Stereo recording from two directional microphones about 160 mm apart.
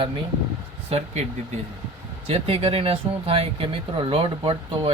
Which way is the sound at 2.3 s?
35° right (ahead or behind).